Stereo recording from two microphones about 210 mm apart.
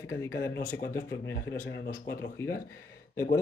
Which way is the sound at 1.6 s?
50° left (ahead or behind).